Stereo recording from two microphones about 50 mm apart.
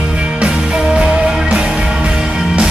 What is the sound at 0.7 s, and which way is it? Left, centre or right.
Music, centre.